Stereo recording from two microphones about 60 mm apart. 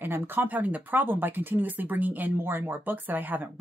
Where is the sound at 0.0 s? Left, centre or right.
Right.